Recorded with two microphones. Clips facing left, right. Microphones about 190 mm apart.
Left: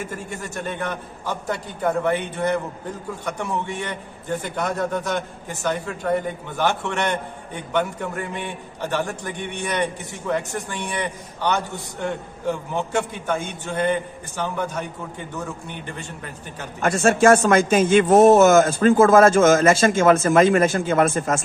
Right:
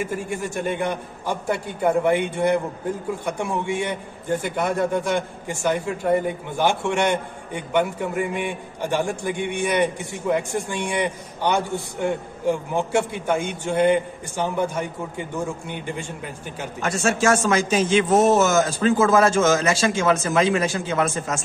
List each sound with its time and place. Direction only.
0.0 s a man's voice: 10° right (ahead or behind)
16.8 s a man's voice: 55° left (ahead or behind)